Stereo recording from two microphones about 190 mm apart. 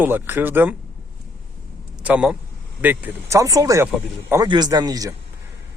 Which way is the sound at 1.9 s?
5° right (ahead or behind).